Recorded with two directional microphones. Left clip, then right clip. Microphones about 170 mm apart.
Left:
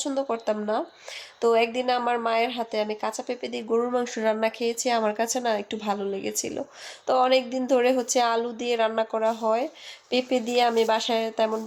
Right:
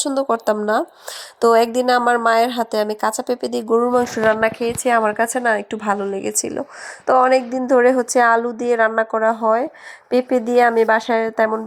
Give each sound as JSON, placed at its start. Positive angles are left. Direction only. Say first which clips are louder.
{"t": 0.0, "sound": "speech", "louder": "right 8 dB", "side_deg": -40}
{"t": 4.2, "sound": "a woman's voice", "louder": "right 8 dB", "side_deg": -10}
{"t": 7.9, "sound": "a woman's voice", "louder": "right 8 dB", "side_deg": -35}